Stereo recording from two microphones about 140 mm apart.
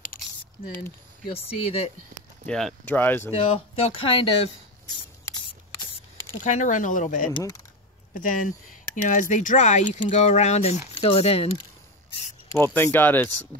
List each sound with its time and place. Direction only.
1.2 s speech: 45° left (ahead or behind)
2.4 s speech: 5° left (ahead or behind)
3.3 s speech: 45° left (ahead or behind)
6.4 s speech: 60° left (ahead or behind)
11.0 s speech: 40° left (ahead or behind)
12.5 s speech: 15° left (ahead or behind)
13.5 s speech: 90° right